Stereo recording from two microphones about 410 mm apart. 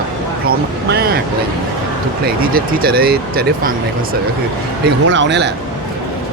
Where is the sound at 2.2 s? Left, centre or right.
Right.